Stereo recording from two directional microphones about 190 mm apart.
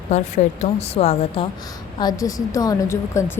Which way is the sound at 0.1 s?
35° left (ahead or behind).